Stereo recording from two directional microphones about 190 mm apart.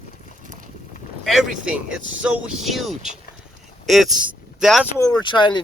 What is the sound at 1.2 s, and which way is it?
Speech, centre (ahead or behind).